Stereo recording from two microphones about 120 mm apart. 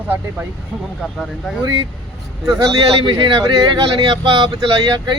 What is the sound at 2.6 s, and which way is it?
Speech, 40° right (ahead or behind).